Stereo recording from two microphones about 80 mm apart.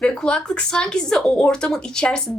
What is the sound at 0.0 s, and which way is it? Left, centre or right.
A woman's voice, centre.